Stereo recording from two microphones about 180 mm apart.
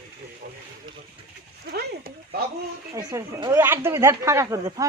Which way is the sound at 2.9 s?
20° right (ahead or behind).